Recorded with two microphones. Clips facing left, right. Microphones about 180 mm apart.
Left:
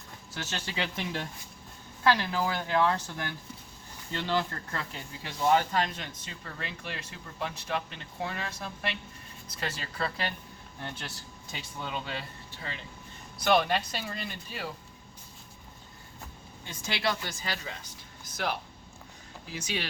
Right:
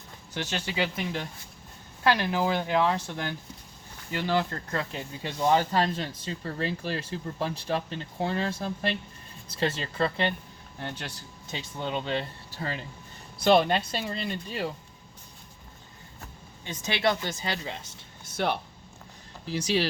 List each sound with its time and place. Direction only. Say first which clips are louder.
0.3 s speech: right 5 dB; 15° right (ahead or behind)
0.9 s speech: right 2 dB; centre (ahead or behind)
2.0 s speech: right 2 dB; 20° right (ahead or behind)
11.5 s speech: right 5 dB; 25° right (ahead or behind)
12.5 s speech: right 7 dB; 40° right (ahead or behind)
13.4 s speech: right 4 dB; 30° right (ahead or behind)
16.6 s speech: right 5 dB; 20° right (ahead or behind)